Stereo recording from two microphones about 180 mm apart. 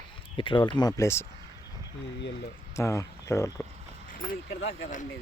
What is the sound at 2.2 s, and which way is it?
Speech, 75° left (ahead or behind).